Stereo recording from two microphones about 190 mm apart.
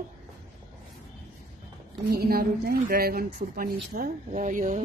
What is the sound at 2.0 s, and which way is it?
A woman's voice, 55° right (ahead or behind).